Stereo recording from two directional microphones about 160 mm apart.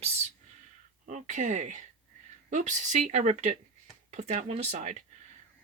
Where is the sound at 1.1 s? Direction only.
50° right (ahead or behind).